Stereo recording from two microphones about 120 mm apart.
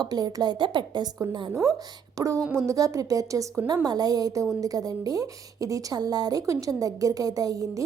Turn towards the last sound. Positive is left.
turn(degrees=-30)  # may be behind; listen again after turning